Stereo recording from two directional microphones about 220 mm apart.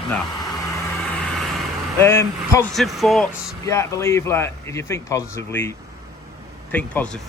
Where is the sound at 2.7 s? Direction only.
Centre (ahead or behind).